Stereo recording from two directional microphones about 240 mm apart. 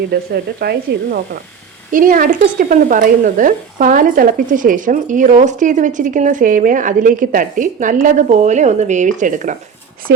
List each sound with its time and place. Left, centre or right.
0.1 s speech: right